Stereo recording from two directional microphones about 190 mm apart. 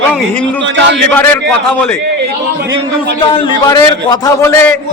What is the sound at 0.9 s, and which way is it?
Speech, 10° left (ahead or behind).